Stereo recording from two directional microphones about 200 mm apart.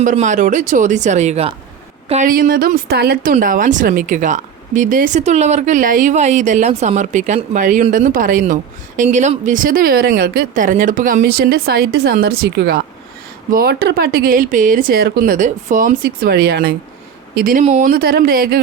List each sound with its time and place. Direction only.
0.0 s a woman's voice: 40° right (ahead or behind)